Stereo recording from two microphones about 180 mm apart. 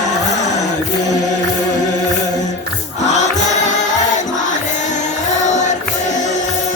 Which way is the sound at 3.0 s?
40° left (ahead or behind).